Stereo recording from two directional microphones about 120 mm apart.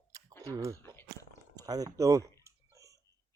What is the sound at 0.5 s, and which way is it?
Speech, 30° right (ahead or behind).